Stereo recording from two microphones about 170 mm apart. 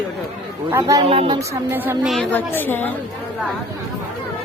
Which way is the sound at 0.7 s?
20° right (ahead or behind).